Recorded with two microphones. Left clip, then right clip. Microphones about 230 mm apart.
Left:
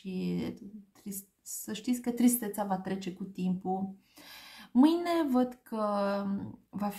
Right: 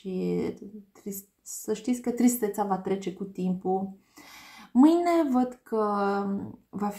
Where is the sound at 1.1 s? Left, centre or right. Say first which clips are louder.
Right 5 dB; left.